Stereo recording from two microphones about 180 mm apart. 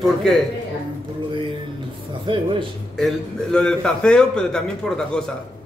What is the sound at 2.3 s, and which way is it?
Speech, 30° right (ahead or behind).